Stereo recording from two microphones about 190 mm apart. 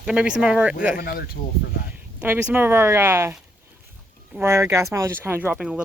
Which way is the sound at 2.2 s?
10° right (ahead or behind).